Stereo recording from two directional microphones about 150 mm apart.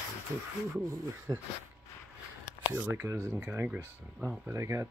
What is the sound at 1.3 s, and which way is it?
Speech, 25° right (ahead or behind).